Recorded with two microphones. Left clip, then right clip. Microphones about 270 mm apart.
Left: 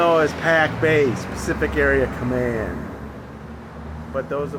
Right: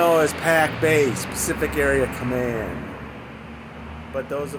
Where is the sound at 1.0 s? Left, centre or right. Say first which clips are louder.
Left 1 dB; centre.